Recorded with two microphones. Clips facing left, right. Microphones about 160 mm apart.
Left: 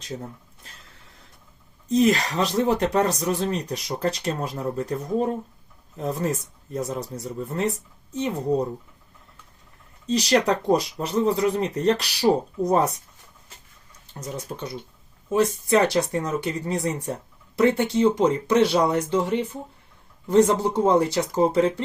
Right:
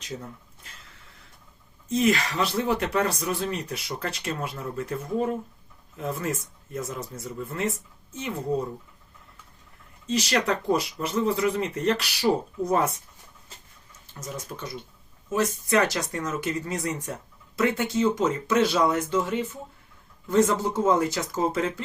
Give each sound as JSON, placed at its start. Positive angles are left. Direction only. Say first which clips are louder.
{"t": 0.0, "sound": "a sound", "louder": "left 3 dB", "side_deg": 35}
{"t": 1.9, "sound": "speech", "louder": "left 3 dB", "side_deg": 35}
{"t": 10.1, "sound": "speech", "louder": "left 4 dB", "side_deg": 35}
{"t": 14.1, "sound": "speech", "louder": "left 3 dB", "side_deg": 35}